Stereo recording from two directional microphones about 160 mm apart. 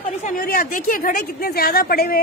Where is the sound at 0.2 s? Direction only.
60° left (ahead or behind).